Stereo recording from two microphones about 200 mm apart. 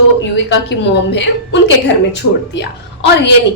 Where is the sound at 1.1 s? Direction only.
65° left (ahead or behind).